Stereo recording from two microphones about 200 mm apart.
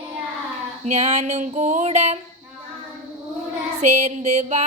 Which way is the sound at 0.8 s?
35° right (ahead or behind).